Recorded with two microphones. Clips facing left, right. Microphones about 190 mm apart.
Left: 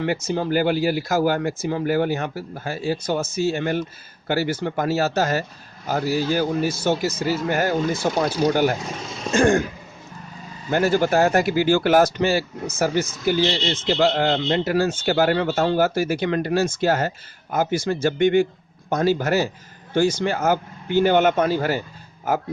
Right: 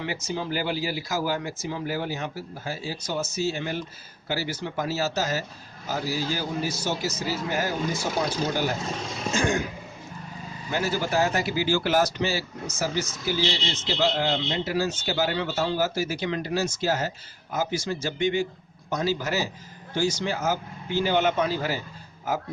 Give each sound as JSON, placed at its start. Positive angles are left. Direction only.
{"t": 0.0, "sound": "a man's voice", "side_deg": 50}
{"t": 10.7, "sound": "a man's voice", "side_deg": 55}